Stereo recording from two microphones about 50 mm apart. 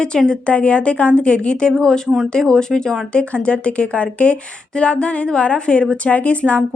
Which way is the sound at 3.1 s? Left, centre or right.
Left.